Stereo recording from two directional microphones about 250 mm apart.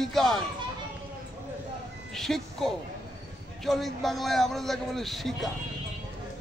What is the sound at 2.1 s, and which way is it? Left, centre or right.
A man's voice, centre.